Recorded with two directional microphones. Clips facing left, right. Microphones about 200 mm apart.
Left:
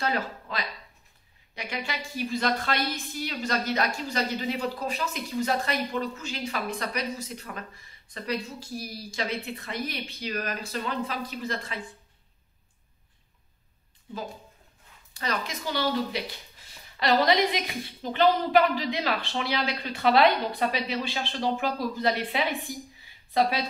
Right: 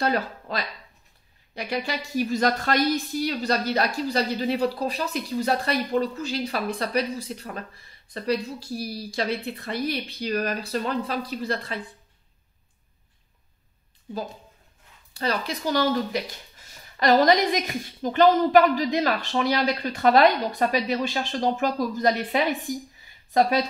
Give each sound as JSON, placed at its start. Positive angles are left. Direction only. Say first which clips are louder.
{"t": 0.0, "sound": "a woman's voice", "louder": "right 4 dB", "side_deg": -40}
{"t": 15.1, "sound": "speech", "louder": "right 4 dB", "side_deg": -35}